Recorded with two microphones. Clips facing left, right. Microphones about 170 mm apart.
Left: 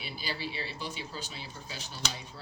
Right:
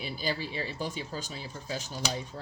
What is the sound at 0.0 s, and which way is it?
Speech, 45° right (ahead or behind).